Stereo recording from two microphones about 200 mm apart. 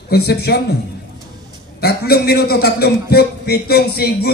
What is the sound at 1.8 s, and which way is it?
A man's voice, 50° left (ahead or behind).